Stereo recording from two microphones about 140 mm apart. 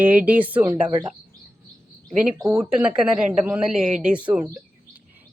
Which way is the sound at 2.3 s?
25° right (ahead or behind).